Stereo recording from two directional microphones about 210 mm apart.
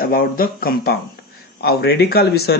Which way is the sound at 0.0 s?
45° left (ahead or behind).